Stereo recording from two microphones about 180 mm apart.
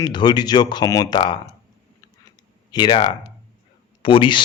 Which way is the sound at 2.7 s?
25° left (ahead or behind).